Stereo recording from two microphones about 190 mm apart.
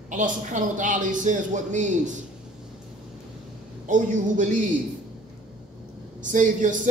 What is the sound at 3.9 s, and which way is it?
Speech, 40° right (ahead or behind).